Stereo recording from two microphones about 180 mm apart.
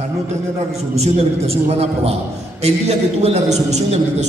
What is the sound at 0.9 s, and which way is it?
A man's voice, 35° right (ahead or behind).